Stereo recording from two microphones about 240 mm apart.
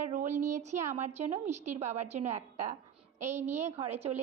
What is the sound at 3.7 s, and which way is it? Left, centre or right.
Speech, right.